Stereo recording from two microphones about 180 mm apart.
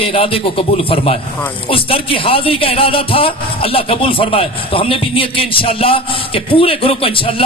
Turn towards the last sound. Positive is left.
turn(degrees=30)  # may be behind; listen again after turning